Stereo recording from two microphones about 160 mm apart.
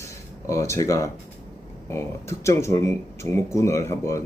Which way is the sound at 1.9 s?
15° left (ahead or behind).